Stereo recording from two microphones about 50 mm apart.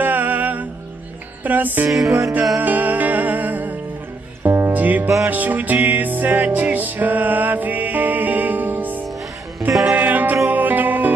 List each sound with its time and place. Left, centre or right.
0.0 s music: right
1.9 s music: centre
2.5 s music: right
4.4 s music: right
4.7 s music: right